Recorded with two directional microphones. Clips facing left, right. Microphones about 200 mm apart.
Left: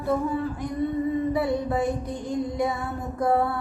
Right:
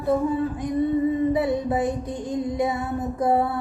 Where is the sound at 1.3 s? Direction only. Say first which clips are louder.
Right 2 dB; 20° right (ahead or behind).